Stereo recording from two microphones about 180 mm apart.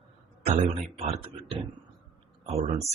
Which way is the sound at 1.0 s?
35° right (ahead or behind).